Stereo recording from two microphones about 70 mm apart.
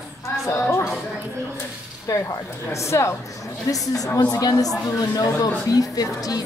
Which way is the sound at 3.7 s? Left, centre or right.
Left.